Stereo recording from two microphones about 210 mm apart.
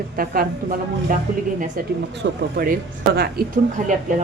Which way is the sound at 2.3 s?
45° right (ahead or behind).